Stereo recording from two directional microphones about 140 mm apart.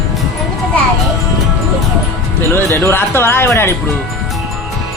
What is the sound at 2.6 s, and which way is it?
Speech, 15° left (ahead or behind).